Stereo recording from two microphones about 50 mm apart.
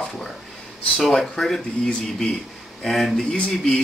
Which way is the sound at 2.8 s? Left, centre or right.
Centre.